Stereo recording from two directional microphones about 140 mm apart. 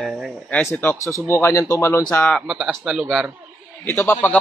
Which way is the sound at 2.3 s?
Centre (ahead or behind).